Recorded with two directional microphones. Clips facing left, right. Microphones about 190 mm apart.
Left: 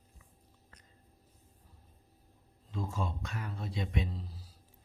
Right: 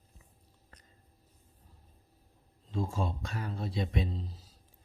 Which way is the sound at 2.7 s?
30° right (ahead or behind).